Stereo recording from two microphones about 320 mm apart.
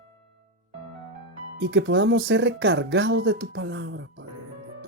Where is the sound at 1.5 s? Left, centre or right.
Right.